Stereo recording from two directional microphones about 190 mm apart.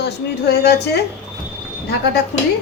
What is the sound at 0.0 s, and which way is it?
Speech, 60° left (ahead or behind).